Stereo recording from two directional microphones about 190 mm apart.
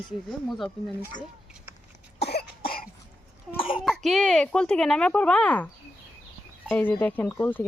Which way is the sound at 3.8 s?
Centre (ahead or behind).